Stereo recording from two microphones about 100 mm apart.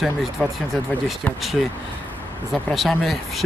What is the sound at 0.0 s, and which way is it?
Speech, centre (ahead or behind).